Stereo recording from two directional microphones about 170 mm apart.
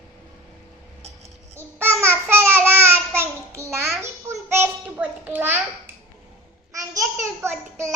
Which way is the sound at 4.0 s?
15° right (ahead or behind).